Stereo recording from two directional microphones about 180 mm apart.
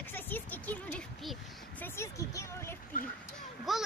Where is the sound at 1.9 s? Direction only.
15° left (ahead or behind).